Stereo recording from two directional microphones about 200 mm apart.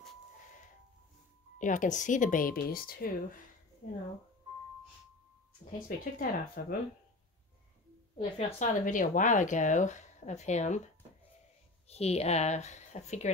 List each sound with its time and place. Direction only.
1.6 s speech: 40° left (ahead or behind)
5.7 s speech: 45° left (ahead or behind)
8.2 s speech: 30° left (ahead or behind)
11.9 s speech: 30° left (ahead or behind)